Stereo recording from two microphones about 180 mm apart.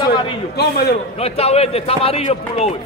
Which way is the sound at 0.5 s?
60° left (ahead or behind).